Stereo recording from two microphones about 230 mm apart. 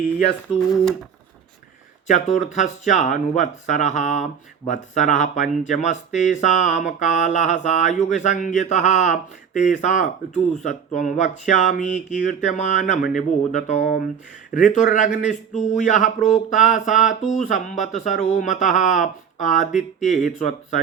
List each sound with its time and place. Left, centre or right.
2.0 s speech: left